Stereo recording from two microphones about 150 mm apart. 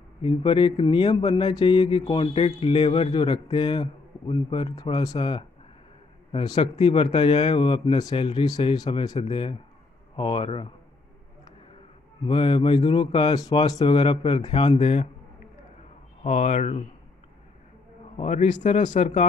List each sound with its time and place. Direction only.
0.2 s speech: 35° left (ahead or behind)
6.5 s speech: 45° left (ahead or behind)
8.7 s speech: 25° left (ahead or behind)
9.2 s speech: 40° left (ahead or behind)
12.2 s speech: 35° left (ahead or behind)
16.3 s speech: 50° left (ahead or behind)
18.1 s a man's voice: 50° left (ahead or behind)